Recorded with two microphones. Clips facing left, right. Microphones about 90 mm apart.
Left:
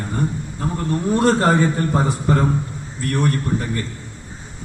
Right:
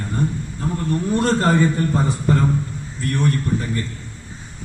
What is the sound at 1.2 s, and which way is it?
A man's voice, 55° left (ahead or behind).